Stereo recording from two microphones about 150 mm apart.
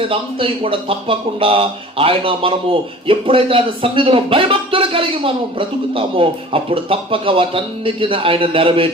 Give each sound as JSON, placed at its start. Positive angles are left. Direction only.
{"t": 0.1, "sound": "speech", "side_deg": -35}